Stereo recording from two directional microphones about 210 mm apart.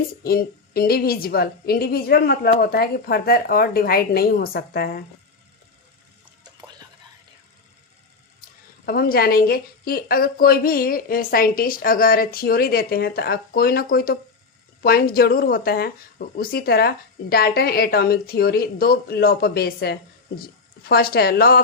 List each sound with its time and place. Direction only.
0.2 s a woman's voice: 45° left (ahead or behind)
8.9 s a woman's voice: 45° left (ahead or behind)